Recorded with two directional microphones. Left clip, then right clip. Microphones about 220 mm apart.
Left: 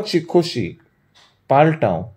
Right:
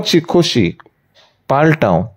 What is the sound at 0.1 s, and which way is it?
Speech, 40° right (ahead or behind).